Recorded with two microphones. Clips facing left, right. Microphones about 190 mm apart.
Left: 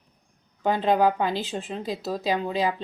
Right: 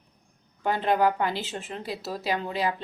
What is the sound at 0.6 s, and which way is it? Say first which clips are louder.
A woman's voice: left 2 dB; 15° left (ahead or behind).